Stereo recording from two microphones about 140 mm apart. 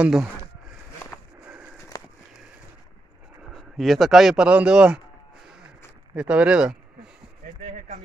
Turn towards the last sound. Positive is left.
turn(degrees=-5)  # may be behind; listen again after turning